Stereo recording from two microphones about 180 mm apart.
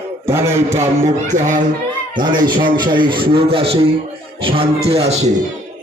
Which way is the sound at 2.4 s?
25° right (ahead or behind).